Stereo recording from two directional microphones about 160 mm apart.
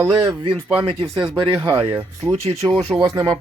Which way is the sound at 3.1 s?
25° right (ahead or behind).